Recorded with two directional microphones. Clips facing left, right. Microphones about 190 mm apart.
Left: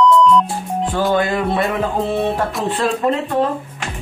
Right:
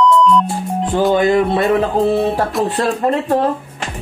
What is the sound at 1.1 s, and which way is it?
Music, 20° right (ahead or behind).